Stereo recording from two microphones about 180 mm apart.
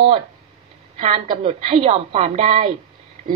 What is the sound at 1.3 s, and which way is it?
A woman's voice, 30° right (ahead or behind).